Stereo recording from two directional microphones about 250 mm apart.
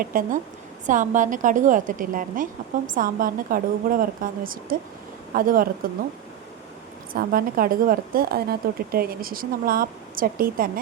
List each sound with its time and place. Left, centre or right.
0.0 s a woman's voice: right
7.1 s a woman's voice: right